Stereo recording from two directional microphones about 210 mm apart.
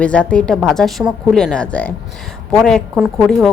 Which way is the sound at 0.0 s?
5° left (ahead or behind).